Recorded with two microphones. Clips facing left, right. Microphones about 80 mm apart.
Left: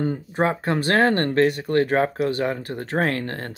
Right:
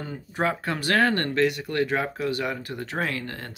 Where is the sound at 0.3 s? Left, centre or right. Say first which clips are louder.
Left 2 dB; left.